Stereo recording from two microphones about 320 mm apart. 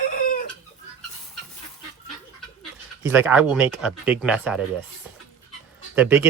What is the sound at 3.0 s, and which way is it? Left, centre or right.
Speech, centre.